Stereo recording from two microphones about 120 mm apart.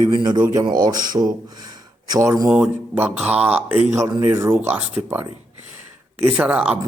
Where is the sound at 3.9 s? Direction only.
30° right (ahead or behind).